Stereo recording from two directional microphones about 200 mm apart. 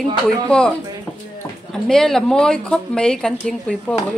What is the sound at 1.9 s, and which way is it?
Speech, 5° left (ahead or behind).